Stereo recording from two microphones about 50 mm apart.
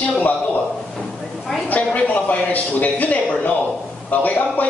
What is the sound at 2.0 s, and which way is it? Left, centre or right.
A man's voice, left.